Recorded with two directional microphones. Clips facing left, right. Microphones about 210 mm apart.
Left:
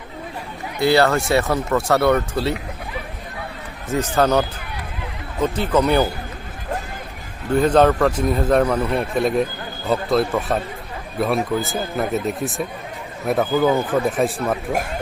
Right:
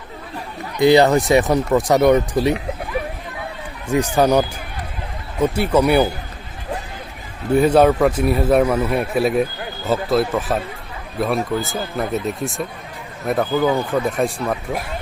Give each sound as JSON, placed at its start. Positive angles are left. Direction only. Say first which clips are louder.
{"t": 0.8, "sound": "a man's voice", "louder": "right 4 dB", "side_deg": -20}
{"t": 3.8, "sound": "a man's voice", "louder": "right 2 dB", "side_deg": -15}
{"t": 7.5, "sound": "a man's voice", "louder": "right 2 dB", "side_deg": -10}